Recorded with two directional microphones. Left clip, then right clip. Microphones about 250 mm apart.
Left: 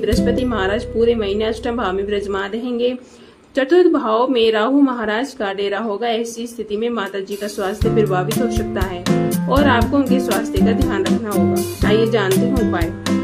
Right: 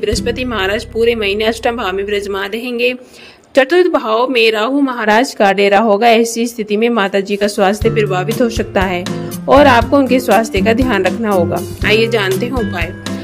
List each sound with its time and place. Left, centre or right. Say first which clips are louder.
0.2 s speech: right 2 dB; right
3.5 s speech: right 4 dB; right
11.8 s speech: right 4 dB; right